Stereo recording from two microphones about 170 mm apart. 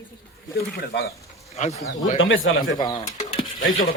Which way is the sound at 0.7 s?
65° left (ahead or behind).